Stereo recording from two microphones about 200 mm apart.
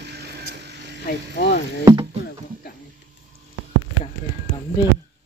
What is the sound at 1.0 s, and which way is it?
Speech, 50° left (ahead or behind).